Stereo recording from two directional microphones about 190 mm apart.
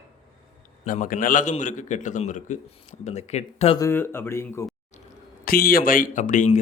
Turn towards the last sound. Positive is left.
turn(degrees=40)  # may be behind; listen again after turning